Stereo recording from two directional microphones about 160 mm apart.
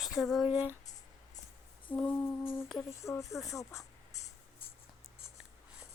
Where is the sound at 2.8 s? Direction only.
20° left (ahead or behind).